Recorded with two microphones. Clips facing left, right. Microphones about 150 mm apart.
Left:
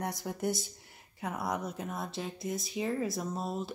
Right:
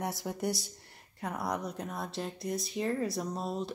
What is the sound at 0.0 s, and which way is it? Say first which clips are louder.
A woman's voice: even; centre (ahead or behind).